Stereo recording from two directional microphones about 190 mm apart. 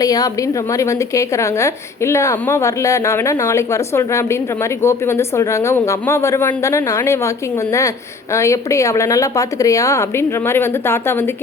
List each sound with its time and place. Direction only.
0.0 s a woman's voice: 20° left (ahead or behind)
8.3 s a woman's voice: 15° left (ahead or behind)